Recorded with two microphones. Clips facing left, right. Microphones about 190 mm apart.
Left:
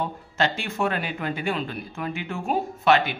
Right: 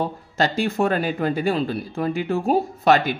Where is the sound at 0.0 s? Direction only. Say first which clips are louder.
Right 3 dB; 35° right (ahead or behind).